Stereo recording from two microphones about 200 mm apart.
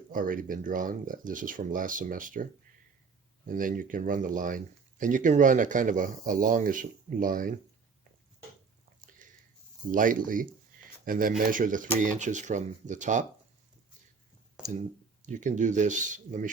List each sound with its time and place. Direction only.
0.1 s speech: 45° right (ahead or behind)
9.2 s a sound: 40° right (ahead or behind)
9.9 s speech: 40° right (ahead or behind)
15.3 s speech: 40° right (ahead or behind)